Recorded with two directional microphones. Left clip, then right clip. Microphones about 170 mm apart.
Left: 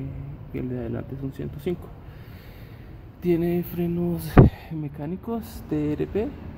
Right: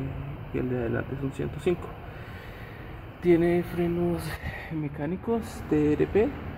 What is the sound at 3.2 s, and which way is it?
Speech, 20° left (ahead or behind).